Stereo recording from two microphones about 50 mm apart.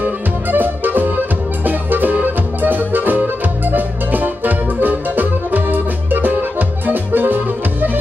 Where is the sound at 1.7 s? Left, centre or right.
Right.